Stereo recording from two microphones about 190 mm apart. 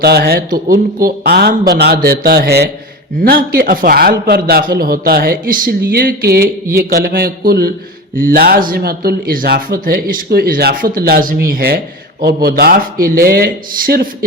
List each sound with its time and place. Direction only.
0.0 s speech: 55° right (ahead or behind)